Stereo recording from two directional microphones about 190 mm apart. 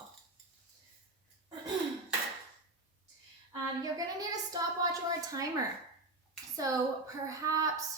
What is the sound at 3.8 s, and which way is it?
Speech, 20° right (ahead or behind).